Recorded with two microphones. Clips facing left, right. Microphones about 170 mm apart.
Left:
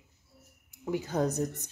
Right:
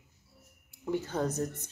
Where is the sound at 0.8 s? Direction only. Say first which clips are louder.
Left 2 dB; 10° left (ahead or behind).